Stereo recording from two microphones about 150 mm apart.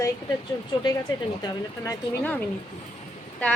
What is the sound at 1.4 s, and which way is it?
Speech, 25° left (ahead or behind).